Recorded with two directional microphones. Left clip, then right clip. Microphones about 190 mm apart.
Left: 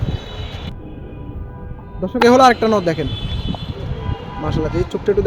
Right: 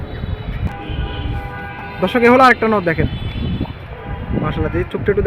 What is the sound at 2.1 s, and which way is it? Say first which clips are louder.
Speech: even; 5° left (ahead or behind).